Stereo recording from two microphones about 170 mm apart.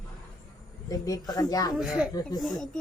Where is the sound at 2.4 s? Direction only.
Centre (ahead or behind).